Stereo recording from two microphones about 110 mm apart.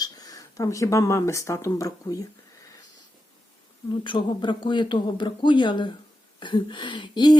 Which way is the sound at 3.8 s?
45° left (ahead or behind).